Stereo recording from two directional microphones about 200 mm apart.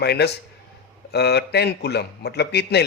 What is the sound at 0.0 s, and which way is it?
Speech, 55° left (ahead or behind).